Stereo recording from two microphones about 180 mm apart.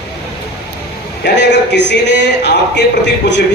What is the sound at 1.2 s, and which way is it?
A man's voice, 75° left (ahead or behind).